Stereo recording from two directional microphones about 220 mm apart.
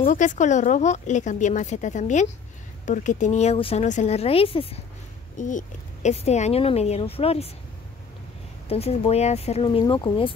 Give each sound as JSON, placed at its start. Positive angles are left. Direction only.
{"t": 0.1, "sound": "a woman's voice", "side_deg": 35}
{"t": 5.4, "sound": "speech", "side_deg": 35}
{"t": 8.6, "sound": "speech", "side_deg": 25}